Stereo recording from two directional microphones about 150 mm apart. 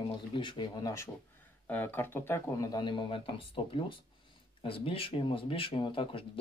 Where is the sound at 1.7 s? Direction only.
15° left (ahead or behind).